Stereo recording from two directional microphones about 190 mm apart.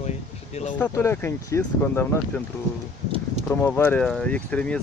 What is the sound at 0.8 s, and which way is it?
Speech, 10° left (ahead or behind).